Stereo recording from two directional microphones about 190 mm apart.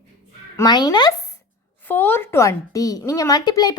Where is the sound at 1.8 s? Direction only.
10° left (ahead or behind).